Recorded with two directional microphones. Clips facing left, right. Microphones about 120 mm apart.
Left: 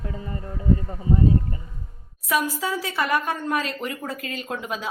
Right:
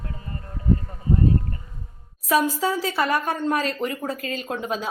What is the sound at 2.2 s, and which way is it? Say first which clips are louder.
A woman's voice: right 3 dB; 30° right (ahead or behind).